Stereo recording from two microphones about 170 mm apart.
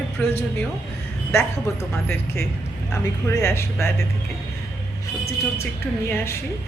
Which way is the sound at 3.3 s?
15° left (ahead or behind).